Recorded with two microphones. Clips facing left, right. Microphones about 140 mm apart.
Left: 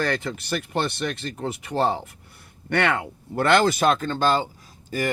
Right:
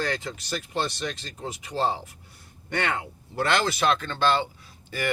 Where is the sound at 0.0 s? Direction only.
60° left (ahead or behind).